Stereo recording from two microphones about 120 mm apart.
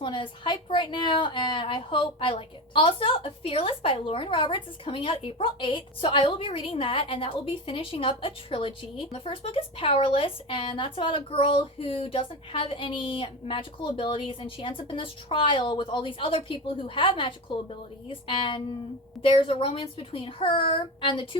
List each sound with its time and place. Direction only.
0.0 s a woman's voice: 40° left (ahead or behind)